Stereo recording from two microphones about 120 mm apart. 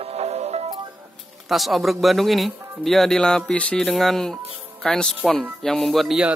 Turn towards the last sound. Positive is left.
turn(degrees=-5)  # may be behind; listen again after turning